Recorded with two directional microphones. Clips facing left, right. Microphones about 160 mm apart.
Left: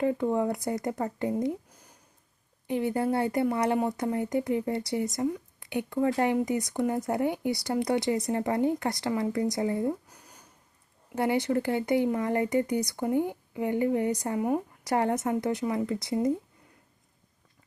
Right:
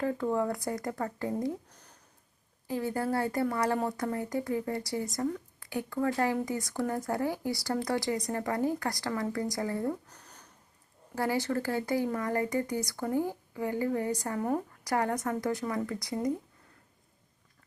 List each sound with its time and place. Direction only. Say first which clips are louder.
0.0 s speech: left 3 dB; 20° left (ahead or behind)
1.7 s a sound: left 1 dB; 10° left (ahead or behind)
2.6 s speech: left 4 dB; 20° left (ahead or behind)
5.1 s a sound: left 3 dB; 15° left (ahead or behind)
5.6 s speech: left 4 dB; 20° left (ahead or behind)
11.1 s speech: left 4 dB; 20° left (ahead or behind)
14.8 s speech: left 4 dB; 25° left (ahead or behind)